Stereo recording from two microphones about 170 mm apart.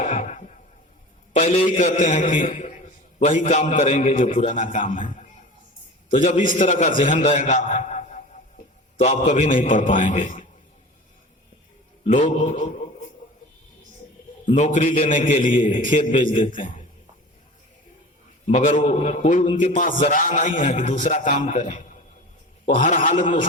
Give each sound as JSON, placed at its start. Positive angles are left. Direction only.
{"t": 0.0, "sound": "a sound", "side_deg": 40}
{"t": 1.3, "sound": "a man's voice", "side_deg": 40}
{"t": 2.6, "sound": "a sound", "side_deg": 45}
{"t": 3.8, "sound": "a man's voice", "side_deg": 45}
{"t": 4.3, "sound": "a man's voice", "side_deg": 35}
{"t": 12.4, "sound": "a man's voice", "side_deg": 40}
{"t": 14.4, "sound": "a man's voice", "side_deg": 50}
{"t": 18.4, "sound": "a man's voice", "side_deg": 45}